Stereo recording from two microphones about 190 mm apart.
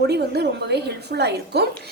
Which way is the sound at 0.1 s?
60° right (ahead or behind).